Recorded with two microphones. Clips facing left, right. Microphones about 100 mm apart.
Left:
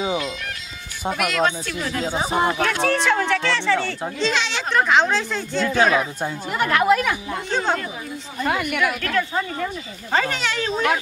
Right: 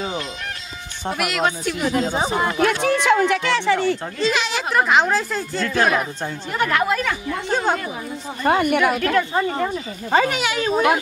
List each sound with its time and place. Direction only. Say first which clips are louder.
1.1 s speech: even; 5° right (ahead or behind)
4.2 s speech: left 1 dB; 5° right (ahead or behind)
6.2 s a woman's voice: even; 15° left (ahead or behind)
7.4 s speech: right 2 dB; 5° right (ahead or behind)
8.5 s speech: right 5 dB; 35° right (ahead or behind)
10.1 s speech: right 3 dB; 10° right (ahead or behind)